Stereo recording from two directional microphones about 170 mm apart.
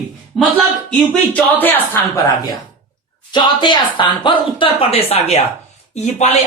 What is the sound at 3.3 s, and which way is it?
A woman's voice, 25° left (ahead or behind).